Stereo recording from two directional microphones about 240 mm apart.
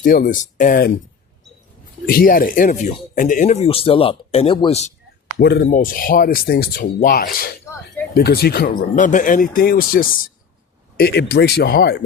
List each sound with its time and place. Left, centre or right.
0.0 s speech: left
2.0 s speech: left
5.4 s speech: left